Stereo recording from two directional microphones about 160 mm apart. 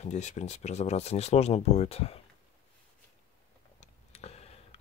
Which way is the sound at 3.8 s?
40° left (ahead or behind).